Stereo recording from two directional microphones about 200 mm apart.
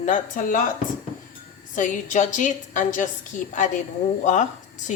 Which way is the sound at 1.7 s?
40° left (ahead or behind).